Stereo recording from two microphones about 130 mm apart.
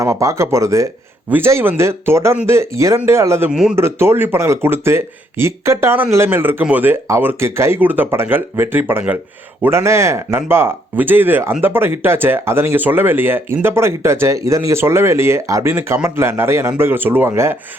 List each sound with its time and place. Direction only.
0.0 s speech: 25° right (ahead or behind)
3.5 s speech: 5° right (ahead or behind)
3.8 s speech: 20° right (ahead or behind)